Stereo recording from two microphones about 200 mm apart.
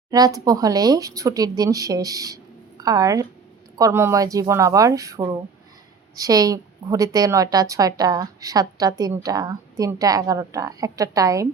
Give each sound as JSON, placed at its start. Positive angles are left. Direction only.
{"t": 0.1, "sound": "a woman's voice", "side_deg": -20}